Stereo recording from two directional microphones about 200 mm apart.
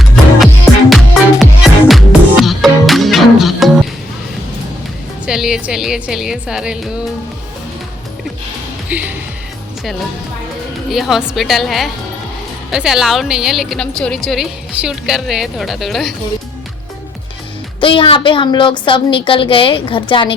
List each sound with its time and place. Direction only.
0.0 s music: centre (ahead or behind)
5.2 s a woman's voice: 5° right (ahead or behind)
8.9 s music: 10° right (ahead or behind)
10.9 s a woman's voice: centre (ahead or behind)
17.7 s a woman's voice: 25° left (ahead or behind)